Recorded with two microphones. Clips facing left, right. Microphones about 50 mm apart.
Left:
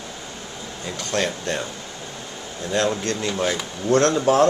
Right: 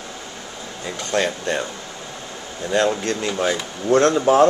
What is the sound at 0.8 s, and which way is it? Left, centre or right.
Speech, centre.